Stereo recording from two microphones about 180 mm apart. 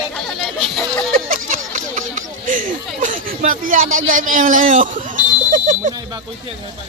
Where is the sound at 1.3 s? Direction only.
50° right (ahead or behind).